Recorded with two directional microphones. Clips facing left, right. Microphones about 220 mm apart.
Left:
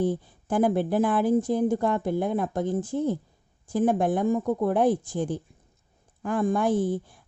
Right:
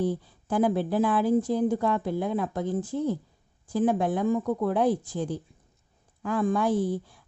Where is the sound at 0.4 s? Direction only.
50° left (ahead or behind).